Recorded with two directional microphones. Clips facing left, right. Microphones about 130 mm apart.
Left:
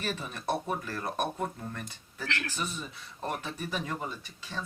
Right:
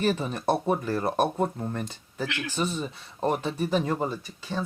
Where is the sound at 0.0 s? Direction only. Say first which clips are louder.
Right 9 dB; 30° right (ahead or behind).